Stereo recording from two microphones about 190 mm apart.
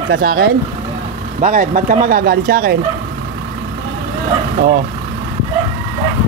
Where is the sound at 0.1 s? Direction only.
85° right.